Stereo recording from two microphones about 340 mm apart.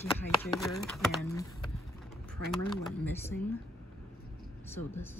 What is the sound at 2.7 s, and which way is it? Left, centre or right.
Speech, centre.